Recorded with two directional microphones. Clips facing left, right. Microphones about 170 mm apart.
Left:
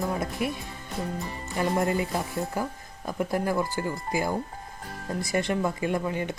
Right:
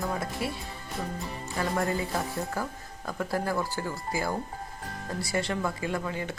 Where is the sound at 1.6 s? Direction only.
20° left (ahead or behind).